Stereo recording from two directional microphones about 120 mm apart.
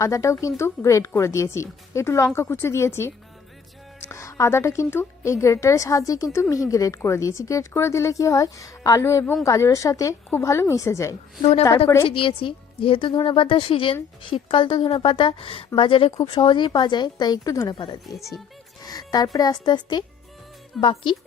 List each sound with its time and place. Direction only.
0.0 s a woman's voice: 25° left (ahead or behind)
4.1 s a woman's voice: 25° left (ahead or behind)
12.0 s a woman's voice: 50° left (ahead or behind); by 17.7 s 30° left (ahead or behind)
17.7 s a woman's voice: 40° left (ahead or behind)